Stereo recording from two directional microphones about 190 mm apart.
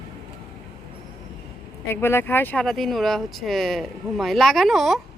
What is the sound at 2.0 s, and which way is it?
Speech, 10° left (ahead or behind).